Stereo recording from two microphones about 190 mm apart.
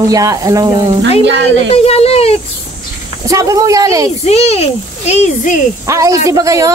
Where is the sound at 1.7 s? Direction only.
35° left (ahead or behind).